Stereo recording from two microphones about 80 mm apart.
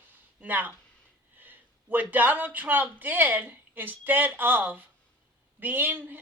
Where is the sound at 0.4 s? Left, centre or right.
Right.